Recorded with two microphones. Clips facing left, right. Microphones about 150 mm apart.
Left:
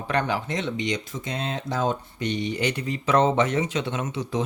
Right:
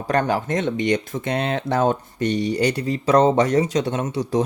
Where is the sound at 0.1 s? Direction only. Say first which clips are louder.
Right 5 dB; 45° right (ahead or behind).